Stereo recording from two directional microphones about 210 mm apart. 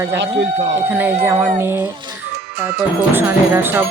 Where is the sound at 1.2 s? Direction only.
10° right (ahead or behind).